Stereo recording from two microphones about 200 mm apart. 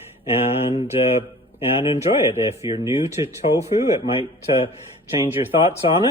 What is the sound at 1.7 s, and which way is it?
Speech, 30° left (ahead or behind).